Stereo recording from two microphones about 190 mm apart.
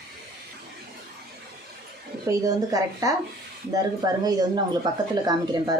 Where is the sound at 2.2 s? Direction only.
20° right (ahead or behind).